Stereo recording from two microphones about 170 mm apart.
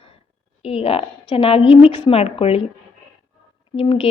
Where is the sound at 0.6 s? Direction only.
35° left (ahead or behind).